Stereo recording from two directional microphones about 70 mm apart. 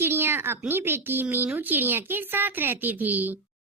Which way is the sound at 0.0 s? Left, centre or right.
Right.